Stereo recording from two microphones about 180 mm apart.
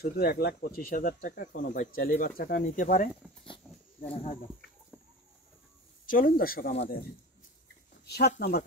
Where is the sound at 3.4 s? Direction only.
30° left (ahead or behind).